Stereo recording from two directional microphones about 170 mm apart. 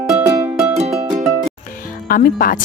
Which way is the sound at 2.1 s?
55° left (ahead or behind).